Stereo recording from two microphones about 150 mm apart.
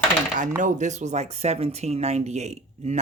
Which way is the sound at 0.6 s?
50° right (ahead or behind).